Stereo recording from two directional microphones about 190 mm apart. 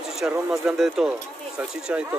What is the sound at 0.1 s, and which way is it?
A man's voice, centre (ahead or behind).